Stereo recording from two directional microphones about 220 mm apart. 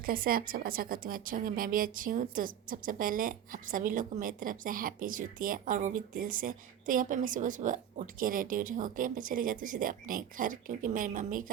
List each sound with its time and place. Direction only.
0.0 s a woman's voice: 40° right (ahead or behind)